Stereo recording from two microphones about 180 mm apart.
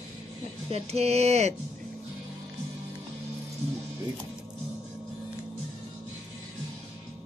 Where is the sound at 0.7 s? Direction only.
35° right (ahead or behind).